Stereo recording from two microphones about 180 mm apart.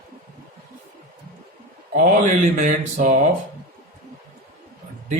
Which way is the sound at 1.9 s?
45° right (ahead or behind).